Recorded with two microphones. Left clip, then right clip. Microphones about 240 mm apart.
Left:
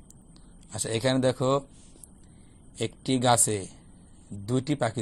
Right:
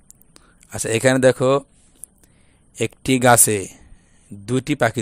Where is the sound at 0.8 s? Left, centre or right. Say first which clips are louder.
Right 10 dB; right.